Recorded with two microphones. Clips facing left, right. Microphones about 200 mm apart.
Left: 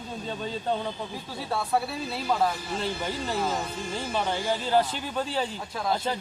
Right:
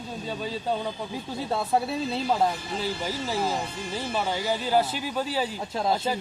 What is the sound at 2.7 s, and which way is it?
Speech, 5° right (ahead or behind).